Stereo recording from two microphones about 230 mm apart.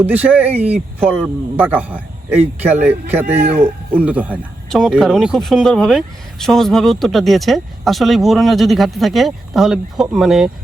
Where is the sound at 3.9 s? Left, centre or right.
Centre.